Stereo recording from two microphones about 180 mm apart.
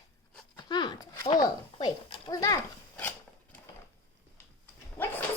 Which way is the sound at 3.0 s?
10° left (ahead or behind).